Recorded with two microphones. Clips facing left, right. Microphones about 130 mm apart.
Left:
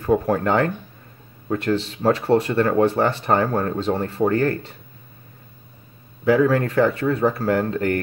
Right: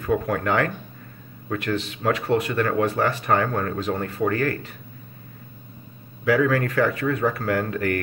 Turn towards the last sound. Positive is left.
turn(degrees=25)  # may be behind; listen again after turning